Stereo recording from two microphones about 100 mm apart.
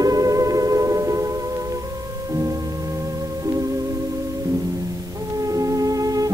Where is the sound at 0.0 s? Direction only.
35° right (ahead or behind).